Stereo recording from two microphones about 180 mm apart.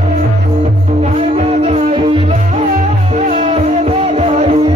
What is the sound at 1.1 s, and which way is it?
Music, 35° right (ahead or behind).